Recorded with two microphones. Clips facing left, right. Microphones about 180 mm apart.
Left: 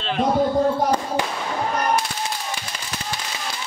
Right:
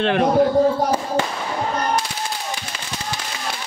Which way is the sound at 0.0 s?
60° right (ahead or behind).